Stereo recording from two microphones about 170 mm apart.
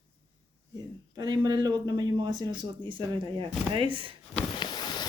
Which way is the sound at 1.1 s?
25° right (ahead or behind).